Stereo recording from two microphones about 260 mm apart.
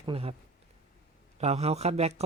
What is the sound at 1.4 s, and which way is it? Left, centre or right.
Speech, right.